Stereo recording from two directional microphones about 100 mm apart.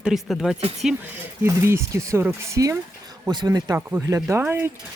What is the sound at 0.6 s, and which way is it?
Speech, 80° right.